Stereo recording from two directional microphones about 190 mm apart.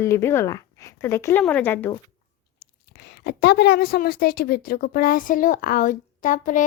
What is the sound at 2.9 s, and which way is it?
A woman's voice, 60° left (ahead or behind).